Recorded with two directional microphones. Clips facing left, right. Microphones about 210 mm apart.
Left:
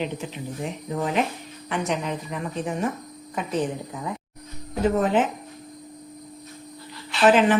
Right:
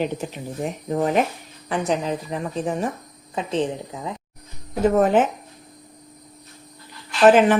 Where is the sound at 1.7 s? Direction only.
35° right (ahead or behind).